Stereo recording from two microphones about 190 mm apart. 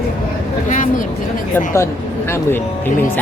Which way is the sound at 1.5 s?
15° left (ahead or behind).